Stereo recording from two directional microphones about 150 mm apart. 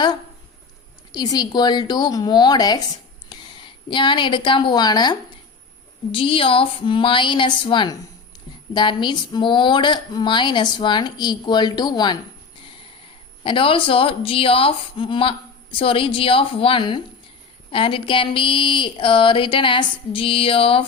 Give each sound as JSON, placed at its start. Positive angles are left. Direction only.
{"t": 1.1, "sound": "a woman's voice", "side_deg": 25}
{"t": 13.4, "sound": "a woman's voice", "side_deg": 35}